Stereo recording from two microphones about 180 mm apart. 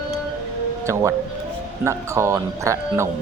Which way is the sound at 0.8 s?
15° right (ahead or behind).